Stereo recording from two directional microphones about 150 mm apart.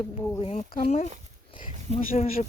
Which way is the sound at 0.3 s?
40° left (ahead or behind).